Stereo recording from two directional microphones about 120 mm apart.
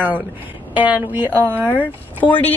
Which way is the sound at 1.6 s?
15° left (ahead or behind).